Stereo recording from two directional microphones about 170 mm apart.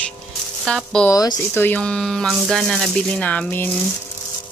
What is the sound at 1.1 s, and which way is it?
Speech, 20° left (ahead or behind).